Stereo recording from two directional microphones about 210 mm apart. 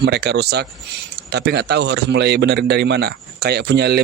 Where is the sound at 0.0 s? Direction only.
50° right (ahead or behind).